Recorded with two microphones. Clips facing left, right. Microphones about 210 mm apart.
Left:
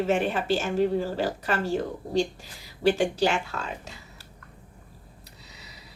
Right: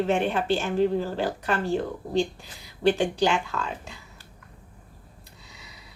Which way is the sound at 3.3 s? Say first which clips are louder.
Right 2 dB; 40° left (ahead or behind).